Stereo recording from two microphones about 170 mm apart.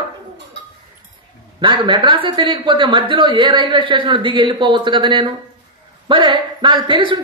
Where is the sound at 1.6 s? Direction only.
30° right (ahead or behind).